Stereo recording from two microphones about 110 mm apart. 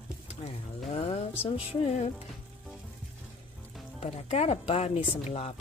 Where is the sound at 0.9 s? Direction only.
65° left (ahead or behind).